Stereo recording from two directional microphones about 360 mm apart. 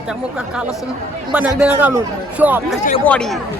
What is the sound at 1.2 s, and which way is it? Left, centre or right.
Speech, centre.